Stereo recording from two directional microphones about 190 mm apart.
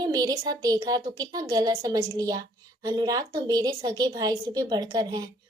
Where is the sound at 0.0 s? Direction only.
20° right (ahead or behind).